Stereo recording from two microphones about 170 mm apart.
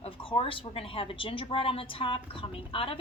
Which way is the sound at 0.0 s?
35° left (ahead or behind).